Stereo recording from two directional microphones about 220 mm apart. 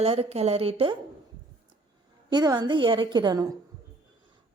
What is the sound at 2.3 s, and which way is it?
Music, 20° right (ahead or behind).